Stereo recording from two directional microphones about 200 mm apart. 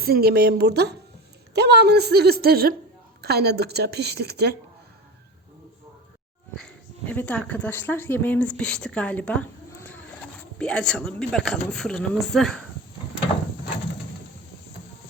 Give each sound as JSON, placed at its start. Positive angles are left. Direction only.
{"t": 0.0, "sound": "a woman's voice", "side_deg": -50}
{"t": 6.6, "sound": "speech", "side_deg": 10}